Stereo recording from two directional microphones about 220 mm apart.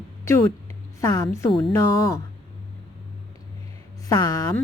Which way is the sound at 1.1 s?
15° left (ahead or behind).